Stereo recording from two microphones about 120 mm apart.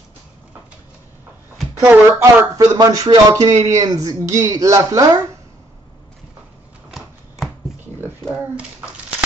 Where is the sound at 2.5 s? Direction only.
30° right (ahead or behind).